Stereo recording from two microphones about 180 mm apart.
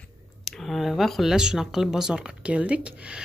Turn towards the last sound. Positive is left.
turn(degrees=-5)  # may be behind; listen again after turning